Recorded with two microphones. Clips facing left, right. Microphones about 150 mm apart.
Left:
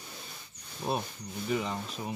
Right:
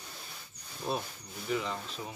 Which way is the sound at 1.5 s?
15° left (ahead or behind).